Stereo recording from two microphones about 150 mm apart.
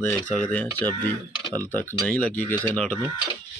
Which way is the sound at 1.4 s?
30° right (ahead or behind).